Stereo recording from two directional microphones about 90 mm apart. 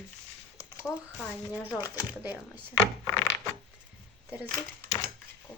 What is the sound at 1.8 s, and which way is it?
Speech, 45° left (ahead or behind).